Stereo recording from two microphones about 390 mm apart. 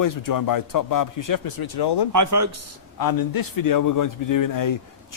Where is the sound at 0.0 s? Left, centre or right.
Left.